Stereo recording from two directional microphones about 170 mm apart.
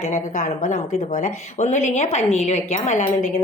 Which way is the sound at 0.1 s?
45° left (ahead or behind).